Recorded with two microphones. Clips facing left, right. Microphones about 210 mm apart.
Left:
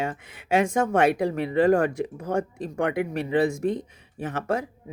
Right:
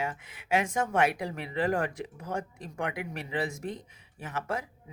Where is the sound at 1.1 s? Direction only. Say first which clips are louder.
Left 10 dB; 55° left (ahead or behind).